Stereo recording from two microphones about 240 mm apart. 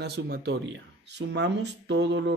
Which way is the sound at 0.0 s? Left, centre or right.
Right.